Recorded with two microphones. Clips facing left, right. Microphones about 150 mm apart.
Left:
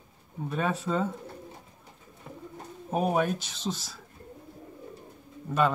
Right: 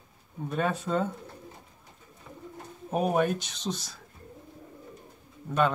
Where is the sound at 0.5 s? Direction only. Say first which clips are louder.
Right 1 dB; centre (ahead or behind).